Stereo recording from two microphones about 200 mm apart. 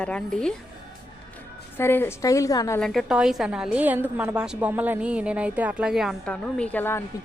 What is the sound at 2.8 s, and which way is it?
A woman's voice, centre (ahead or behind).